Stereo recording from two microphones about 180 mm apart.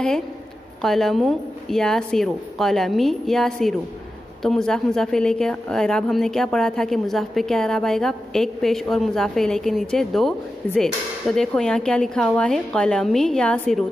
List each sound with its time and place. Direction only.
0.8 s a woman's voice: centre (ahead or behind)